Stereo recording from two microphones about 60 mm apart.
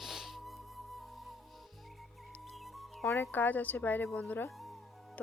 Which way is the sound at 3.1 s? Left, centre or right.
Left.